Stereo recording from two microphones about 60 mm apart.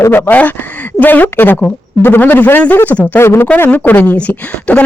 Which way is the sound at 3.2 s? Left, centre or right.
Left.